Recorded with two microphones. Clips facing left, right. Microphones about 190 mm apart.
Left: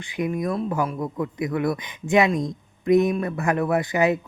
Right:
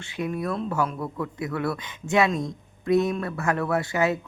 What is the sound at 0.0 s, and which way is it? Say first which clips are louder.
Speech: left 3 dB; 15° left (ahead or behind).